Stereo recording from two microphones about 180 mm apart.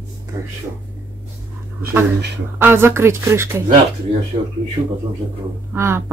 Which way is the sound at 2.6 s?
10° right (ahead or behind).